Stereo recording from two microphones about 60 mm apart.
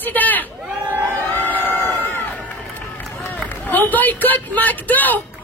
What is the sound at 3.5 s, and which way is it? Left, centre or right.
Speech, left.